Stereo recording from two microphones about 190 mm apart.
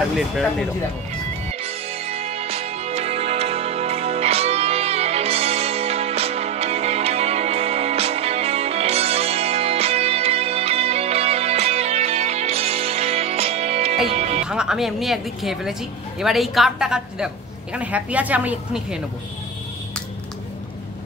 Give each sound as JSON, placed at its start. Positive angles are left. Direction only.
{"t": 0.2, "sound": "speech", "side_deg": 0}
{"t": 1.6, "sound": "music", "side_deg": -30}
{"t": 14.5, "sound": "a woman's voice", "side_deg": -5}